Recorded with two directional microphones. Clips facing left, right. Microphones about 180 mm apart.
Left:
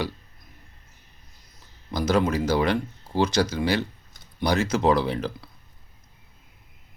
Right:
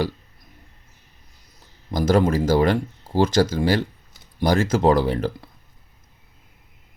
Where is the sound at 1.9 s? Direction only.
45° right (ahead or behind).